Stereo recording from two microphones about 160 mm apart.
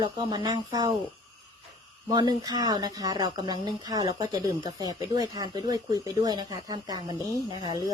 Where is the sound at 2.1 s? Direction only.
25° right (ahead or behind).